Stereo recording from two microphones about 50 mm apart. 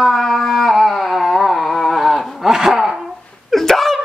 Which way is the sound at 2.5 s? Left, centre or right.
Centre.